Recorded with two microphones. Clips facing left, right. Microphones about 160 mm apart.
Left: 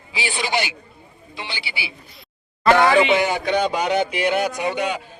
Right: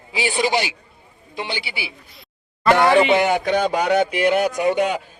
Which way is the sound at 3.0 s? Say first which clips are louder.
Right 2 dB; 50° right (ahead or behind).